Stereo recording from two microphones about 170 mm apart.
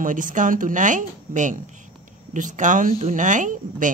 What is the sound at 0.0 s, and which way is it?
A woman's voice, 50° right (ahead or behind).